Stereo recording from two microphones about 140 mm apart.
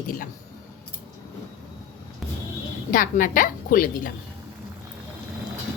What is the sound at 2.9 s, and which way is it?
A woman's voice, 70° left (ahead or behind).